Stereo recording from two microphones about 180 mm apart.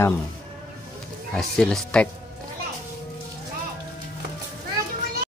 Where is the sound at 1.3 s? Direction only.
Centre (ahead or behind).